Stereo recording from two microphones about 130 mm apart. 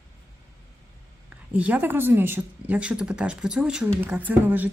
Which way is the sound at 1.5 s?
10° right (ahead or behind).